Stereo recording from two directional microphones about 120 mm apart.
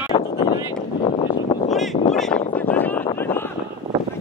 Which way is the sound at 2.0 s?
60° left (ahead or behind).